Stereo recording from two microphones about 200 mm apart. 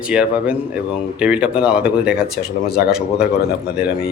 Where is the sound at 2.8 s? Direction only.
5° right (ahead or behind).